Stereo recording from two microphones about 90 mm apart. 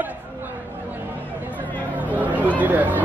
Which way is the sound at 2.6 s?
20° right (ahead or behind).